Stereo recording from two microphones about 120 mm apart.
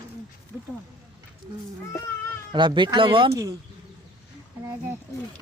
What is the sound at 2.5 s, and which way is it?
Speech, 40° right (ahead or behind).